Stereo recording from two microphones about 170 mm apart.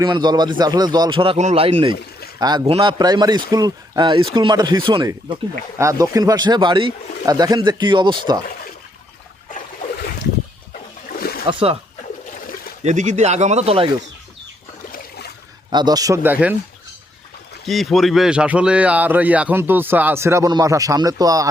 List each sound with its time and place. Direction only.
0.0 s speech: 25° right (ahead or behind)
11.2 s splash: 60° left (ahead or behind)
11.4 s speech: 35° right (ahead or behind)
12.8 s speech: 45° right (ahead or behind)
15.7 s speech: 25° right (ahead or behind)
17.7 s speech: centre (ahead or behind); by 21.4 s 20° right (ahead or behind)